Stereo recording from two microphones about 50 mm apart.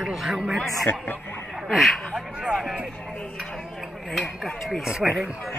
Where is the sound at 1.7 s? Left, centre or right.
Centre.